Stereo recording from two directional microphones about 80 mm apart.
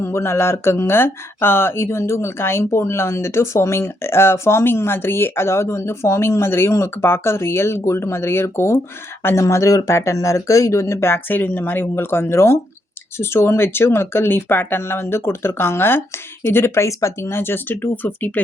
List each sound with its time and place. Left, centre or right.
0.0 s speech: left